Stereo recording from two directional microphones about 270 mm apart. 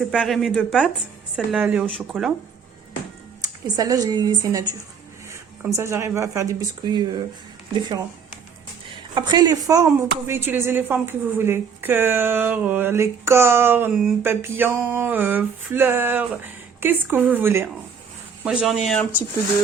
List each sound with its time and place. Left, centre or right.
0.0 s speech: centre
3.4 s a woman's voice: centre
5.7 s a woman's voice: centre